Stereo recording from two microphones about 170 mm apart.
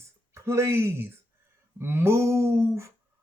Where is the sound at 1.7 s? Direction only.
15° right (ahead or behind).